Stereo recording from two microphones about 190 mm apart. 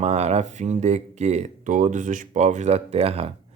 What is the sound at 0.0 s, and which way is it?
Speech, 35° right (ahead or behind).